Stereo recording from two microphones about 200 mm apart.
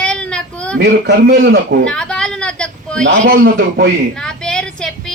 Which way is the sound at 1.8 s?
5° left (ahead or behind).